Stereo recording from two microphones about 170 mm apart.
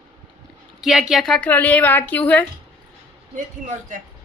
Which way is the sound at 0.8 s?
Centre (ahead or behind).